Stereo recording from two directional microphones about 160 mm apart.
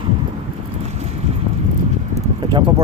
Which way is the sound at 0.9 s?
45° right (ahead or behind).